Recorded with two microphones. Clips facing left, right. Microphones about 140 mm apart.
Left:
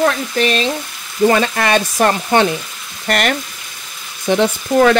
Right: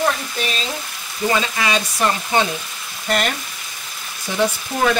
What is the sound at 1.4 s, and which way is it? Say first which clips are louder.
Frying: left 6 dB; 55° left (ahead or behind).